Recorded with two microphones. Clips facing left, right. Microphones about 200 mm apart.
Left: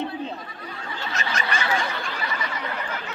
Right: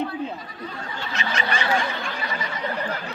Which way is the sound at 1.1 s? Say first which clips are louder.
Right 2 dB; 45° left (ahead or behind).